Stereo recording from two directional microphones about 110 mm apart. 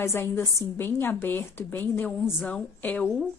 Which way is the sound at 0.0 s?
20° left (ahead or behind).